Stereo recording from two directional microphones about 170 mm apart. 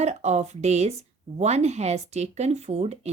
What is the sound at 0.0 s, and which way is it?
Speech, 40° right (ahead or behind).